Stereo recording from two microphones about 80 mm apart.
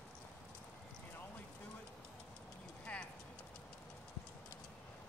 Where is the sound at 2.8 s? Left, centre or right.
Centre.